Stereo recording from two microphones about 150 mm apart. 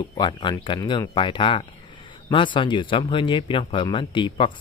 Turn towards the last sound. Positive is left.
turn(degrees=35)  # may be behind; listen again after turning